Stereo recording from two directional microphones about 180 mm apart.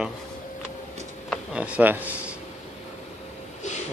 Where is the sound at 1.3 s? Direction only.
5° right (ahead or behind).